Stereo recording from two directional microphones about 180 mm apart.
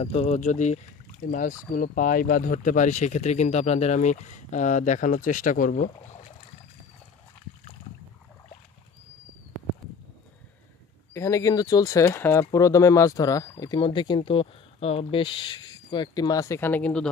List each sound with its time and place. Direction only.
0.0 s speech: 35° left (ahead or behind)
11.1 s speech: 15° left (ahead or behind)